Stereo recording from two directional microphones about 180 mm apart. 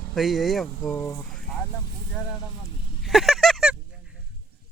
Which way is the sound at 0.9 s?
20° left (ahead or behind).